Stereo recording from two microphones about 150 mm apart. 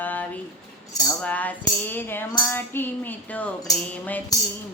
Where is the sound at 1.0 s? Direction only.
10° left (ahead or behind).